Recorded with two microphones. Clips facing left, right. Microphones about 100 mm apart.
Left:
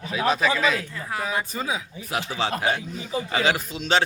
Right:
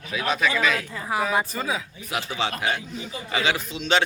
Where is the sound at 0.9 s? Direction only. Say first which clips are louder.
Right 4 dB; 15° right (ahead or behind).